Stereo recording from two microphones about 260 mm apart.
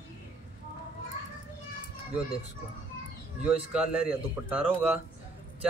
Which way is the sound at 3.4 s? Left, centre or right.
Centre.